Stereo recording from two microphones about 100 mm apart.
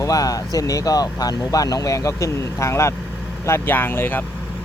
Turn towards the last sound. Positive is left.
turn(degrees=20)  # may be behind; listen again after turning